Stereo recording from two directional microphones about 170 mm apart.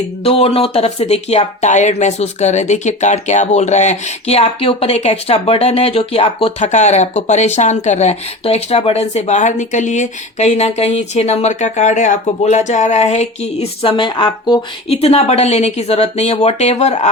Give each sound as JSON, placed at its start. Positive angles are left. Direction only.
{"t": 0.3, "sound": "speech", "side_deg": 35}